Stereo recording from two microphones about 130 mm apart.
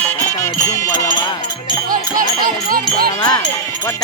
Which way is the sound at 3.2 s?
30° left (ahead or behind).